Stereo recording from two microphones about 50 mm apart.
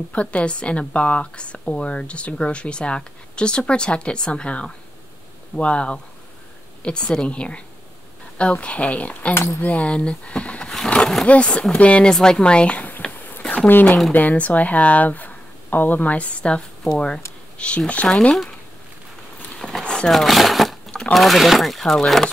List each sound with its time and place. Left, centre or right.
0.1 s speech: left
9.3 s speech: left
9.6 s speech: left
12.1 s speech: centre
13.3 s a sound: left
13.7 s speech: left
18.0 s speech: centre
19.8 s a sound: centre
20.1 s speech: centre